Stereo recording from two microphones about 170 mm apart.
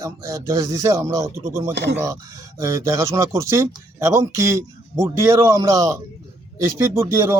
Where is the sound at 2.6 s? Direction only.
15° right (ahead or behind).